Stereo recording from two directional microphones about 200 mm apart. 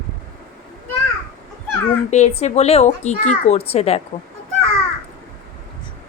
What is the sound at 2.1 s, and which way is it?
Speech, 35° left (ahead or behind).